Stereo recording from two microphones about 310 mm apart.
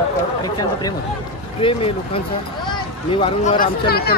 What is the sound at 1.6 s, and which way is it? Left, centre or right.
Speech, centre.